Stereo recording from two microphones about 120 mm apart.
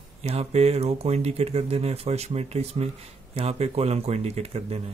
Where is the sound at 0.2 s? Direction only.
60° right (ahead or behind).